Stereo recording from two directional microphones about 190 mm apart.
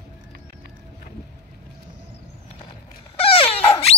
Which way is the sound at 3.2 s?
30° left (ahead or behind).